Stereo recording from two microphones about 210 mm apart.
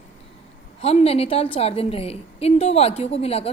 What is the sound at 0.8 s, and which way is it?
A woman's voice, 30° left (ahead or behind).